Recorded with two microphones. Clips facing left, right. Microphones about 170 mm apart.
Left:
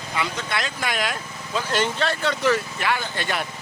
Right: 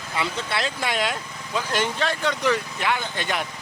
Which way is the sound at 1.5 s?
15° right (ahead or behind).